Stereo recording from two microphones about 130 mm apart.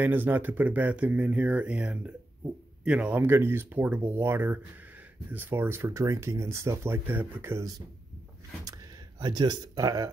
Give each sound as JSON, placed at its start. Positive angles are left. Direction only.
{"t": 0.0, "sound": "speech", "side_deg": -15}
{"t": 9.2, "sound": "speech", "side_deg": -35}